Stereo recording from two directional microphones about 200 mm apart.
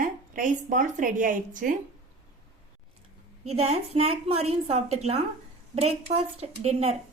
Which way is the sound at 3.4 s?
30° right (ahead or behind).